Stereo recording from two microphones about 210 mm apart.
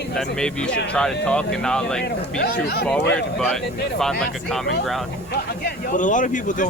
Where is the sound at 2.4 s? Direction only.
50° left (ahead or behind).